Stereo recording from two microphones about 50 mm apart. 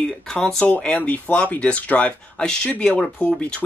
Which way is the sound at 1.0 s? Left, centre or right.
Left.